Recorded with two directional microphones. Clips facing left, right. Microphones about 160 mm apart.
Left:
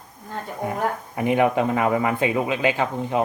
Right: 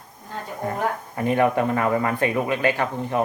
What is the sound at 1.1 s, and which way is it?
Speech, 15° left (ahead or behind).